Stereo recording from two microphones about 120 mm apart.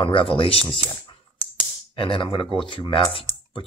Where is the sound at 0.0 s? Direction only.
45° left (ahead or behind).